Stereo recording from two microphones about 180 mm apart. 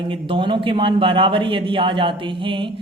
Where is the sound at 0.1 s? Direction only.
30° right (ahead or behind).